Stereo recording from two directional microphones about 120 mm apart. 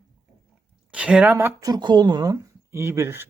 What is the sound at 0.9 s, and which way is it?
Speech, 10° right (ahead or behind).